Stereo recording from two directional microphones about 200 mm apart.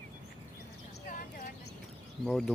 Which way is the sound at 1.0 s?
45° left (ahead or behind).